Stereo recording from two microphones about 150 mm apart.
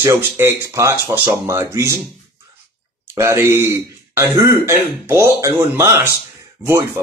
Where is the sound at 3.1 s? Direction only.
20° right (ahead or behind).